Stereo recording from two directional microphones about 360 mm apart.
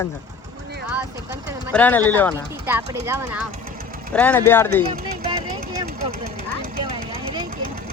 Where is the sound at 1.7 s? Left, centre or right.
Centre.